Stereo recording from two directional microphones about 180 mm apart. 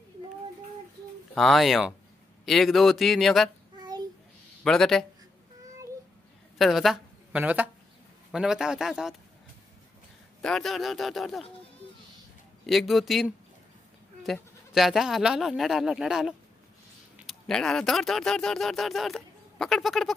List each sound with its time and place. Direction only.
1.3 s speech: centre (ahead or behind)
3.7 s child singing: 25° right (ahead or behind)
4.6 s speech: centre (ahead or behind)
6.6 s a woman's voice: centre (ahead or behind)
10.4 s speech: centre (ahead or behind)
12.6 s speech: centre (ahead or behind)